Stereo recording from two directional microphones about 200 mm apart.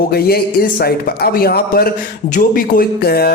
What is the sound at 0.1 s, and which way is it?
Speech, 50° left (ahead or behind).